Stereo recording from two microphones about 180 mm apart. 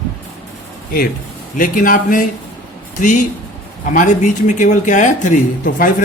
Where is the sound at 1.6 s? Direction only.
50° left (ahead or behind).